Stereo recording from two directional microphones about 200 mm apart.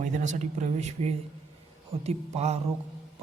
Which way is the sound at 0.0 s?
35° right (ahead or behind).